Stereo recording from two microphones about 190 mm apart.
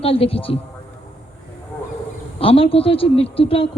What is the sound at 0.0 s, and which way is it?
Speech, 30° left (ahead or behind).